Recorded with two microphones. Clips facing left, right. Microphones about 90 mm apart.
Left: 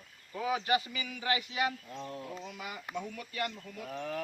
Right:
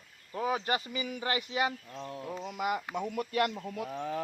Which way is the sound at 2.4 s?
55° right (ahead or behind).